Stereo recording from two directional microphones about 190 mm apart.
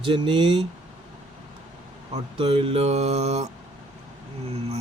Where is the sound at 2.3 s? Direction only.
30° right (ahead or behind).